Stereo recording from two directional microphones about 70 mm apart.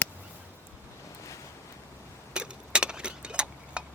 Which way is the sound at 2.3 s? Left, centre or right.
Centre.